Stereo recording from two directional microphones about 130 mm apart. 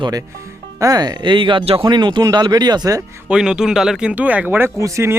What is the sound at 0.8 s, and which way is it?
Speech, 30° right (ahead or behind).